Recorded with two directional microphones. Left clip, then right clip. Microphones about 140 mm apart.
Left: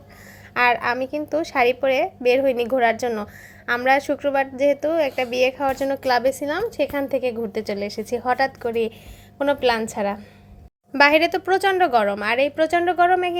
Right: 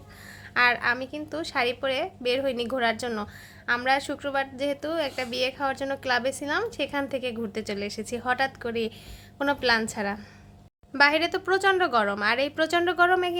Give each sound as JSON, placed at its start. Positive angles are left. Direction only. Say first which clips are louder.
{"t": 0.5, "sound": "a woman's voice", "louder": "left 4 dB", "side_deg": 25}